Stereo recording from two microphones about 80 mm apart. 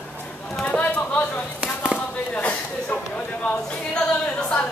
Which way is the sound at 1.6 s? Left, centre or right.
Centre.